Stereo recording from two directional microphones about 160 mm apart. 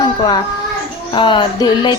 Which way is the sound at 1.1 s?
30° left (ahead or behind).